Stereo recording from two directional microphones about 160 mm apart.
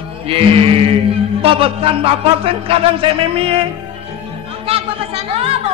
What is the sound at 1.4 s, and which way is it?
Speech, 35° right (ahead or behind).